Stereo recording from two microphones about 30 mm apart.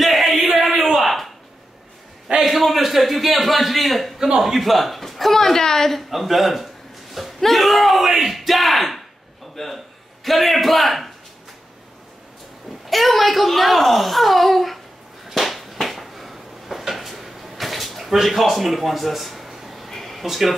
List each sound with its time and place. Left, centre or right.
0.0 s a sound: centre
2.4 s a child's voice: centre
5.9 s a child's voice: centre
9.6 s speech: centre
10.2 s a child's voice: centre
12.8 s a child's voice: centre
15.3 s a sound: centre
20.2 s speech: centre